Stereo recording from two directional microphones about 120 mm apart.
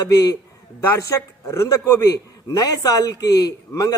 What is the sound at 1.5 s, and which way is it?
A man's voice, 25° left (ahead or behind).